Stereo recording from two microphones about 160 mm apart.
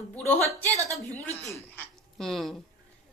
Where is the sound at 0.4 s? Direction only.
20° right (ahead or behind).